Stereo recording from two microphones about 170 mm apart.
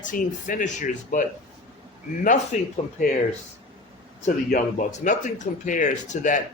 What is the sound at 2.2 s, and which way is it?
Speech, 45° left (ahead or behind).